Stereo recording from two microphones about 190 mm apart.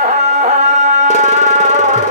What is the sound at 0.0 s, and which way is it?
Music, 40° right (ahead or behind).